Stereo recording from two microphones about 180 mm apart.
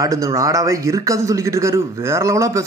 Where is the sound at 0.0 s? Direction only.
15° right (ahead or behind).